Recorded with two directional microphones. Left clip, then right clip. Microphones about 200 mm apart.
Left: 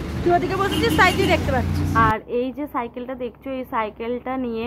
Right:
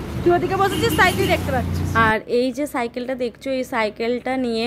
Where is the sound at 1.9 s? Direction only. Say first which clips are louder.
Right 2 dB; 35° right (ahead or behind).